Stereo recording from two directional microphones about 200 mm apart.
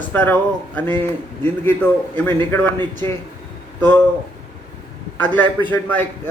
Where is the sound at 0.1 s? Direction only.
10° left (ahead or behind).